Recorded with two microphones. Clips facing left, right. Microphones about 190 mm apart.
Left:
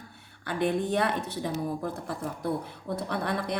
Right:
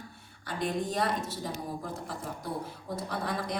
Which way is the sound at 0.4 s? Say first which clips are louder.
Left 5 dB; 60° left (ahead or behind).